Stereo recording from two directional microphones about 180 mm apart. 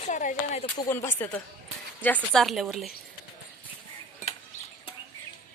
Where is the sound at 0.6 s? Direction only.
20° left (ahead or behind).